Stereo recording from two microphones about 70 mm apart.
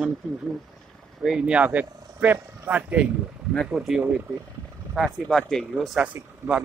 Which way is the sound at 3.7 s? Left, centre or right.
Centre.